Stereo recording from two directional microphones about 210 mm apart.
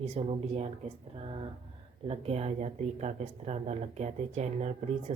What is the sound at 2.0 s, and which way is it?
Speech, 30° right (ahead or behind).